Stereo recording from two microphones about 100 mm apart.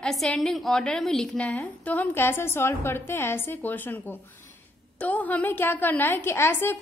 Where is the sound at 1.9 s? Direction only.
20° left (ahead or behind).